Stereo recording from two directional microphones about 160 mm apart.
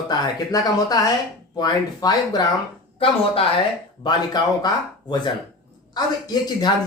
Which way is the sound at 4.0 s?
25° left (ahead or behind).